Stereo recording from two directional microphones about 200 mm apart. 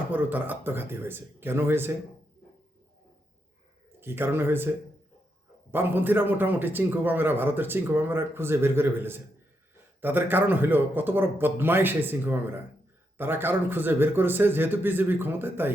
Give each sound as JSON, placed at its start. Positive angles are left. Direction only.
{"t": 0.1, "sound": "speech", "side_deg": -10}
{"t": 4.0, "sound": "speech", "side_deg": -10}
{"t": 5.7, "sound": "speech", "side_deg": -10}